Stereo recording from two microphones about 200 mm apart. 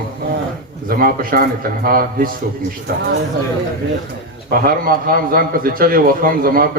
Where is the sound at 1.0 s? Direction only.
50° right (ahead or behind).